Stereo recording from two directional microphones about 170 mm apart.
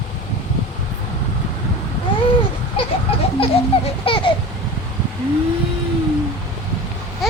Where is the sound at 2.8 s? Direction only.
35° left (ahead or behind).